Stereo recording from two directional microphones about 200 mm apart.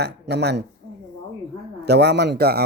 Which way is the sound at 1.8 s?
55° right (ahead or behind).